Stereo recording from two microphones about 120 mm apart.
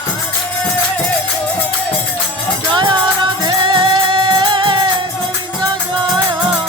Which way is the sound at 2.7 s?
40° right (ahead or behind).